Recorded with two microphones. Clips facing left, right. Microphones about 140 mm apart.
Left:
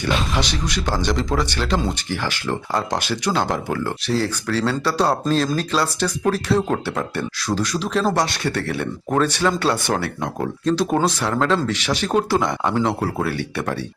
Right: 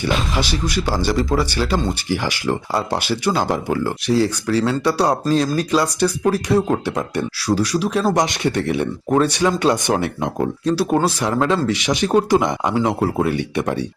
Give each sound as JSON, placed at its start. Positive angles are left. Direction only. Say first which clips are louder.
{"t": 0.0, "sound": "speech", "louder": "right 1 dB", "side_deg": -5}